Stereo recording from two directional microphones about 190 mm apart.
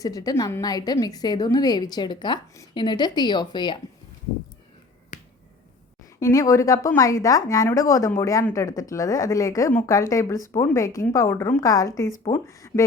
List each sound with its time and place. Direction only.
0.0 s a woman's voice: 20° left (ahead or behind)
5.1 s finger snapping: 40° left (ahead or behind)
6.1 s a woman's voice: 15° left (ahead or behind)